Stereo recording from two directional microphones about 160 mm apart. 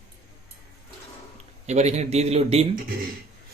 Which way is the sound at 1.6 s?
45° right (ahead or behind).